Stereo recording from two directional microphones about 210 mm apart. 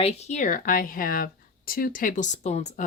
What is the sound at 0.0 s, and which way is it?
Speech, 30° left (ahead or behind).